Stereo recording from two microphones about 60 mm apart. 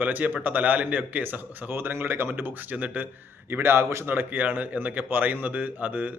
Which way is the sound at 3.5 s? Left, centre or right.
Right.